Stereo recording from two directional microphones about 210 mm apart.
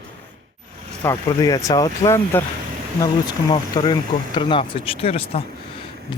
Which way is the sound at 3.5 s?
20° left (ahead or behind).